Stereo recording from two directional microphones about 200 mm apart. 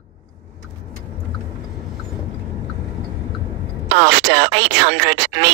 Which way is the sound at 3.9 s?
60° right (ahead or behind).